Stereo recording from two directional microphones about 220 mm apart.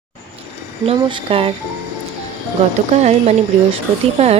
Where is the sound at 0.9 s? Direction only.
25° right (ahead or behind).